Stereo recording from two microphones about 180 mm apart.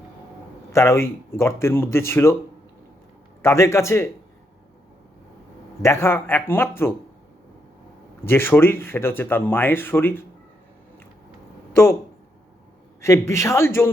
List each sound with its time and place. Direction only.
0.7 s speech: 15° left (ahead or behind)
3.4 s speech: 15° left (ahead or behind)
5.8 s speech: 15° left (ahead or behind)
8.2 s speech: 15° left (ahead or behind)
11.7 s speech: 15° left (ahead or behind)
13.0 s speech: 15° left (ahead or behind)